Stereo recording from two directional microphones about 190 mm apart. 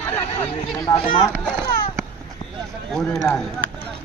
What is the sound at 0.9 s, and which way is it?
Speech, 25° left (ahead or behind).